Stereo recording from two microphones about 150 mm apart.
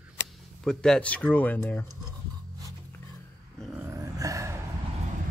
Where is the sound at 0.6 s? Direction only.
5° left (ahead or behind).